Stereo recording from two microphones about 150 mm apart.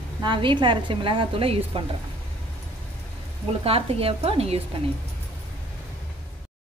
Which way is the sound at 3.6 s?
40° right (ahead or behind).